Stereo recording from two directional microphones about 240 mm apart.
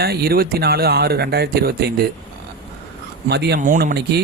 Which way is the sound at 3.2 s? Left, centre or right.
Right.